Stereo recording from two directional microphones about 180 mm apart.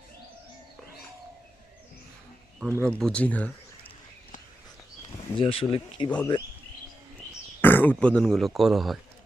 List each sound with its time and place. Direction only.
2.6 s speech: 15° right (ahead or behind)
2.8 s speech: 5° left (ahead or behind)
5.4 s speech: 30° left (ahead or behind)
6.1 s speech: 5° left (ahead or behind)
7.6 s speech: 10° left (ahead or behind)